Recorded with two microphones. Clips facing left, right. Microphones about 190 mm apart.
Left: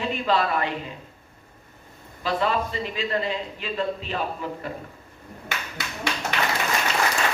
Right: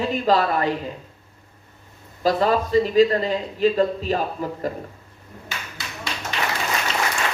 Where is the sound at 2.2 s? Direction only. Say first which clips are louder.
Right 5 dB; 40° right (ahead or behind).